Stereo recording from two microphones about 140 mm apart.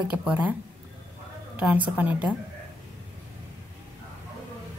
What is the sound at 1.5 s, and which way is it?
Speech, 10° right (ahead or behind).